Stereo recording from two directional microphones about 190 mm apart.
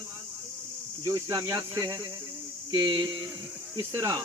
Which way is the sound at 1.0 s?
20° right (ahead or behind).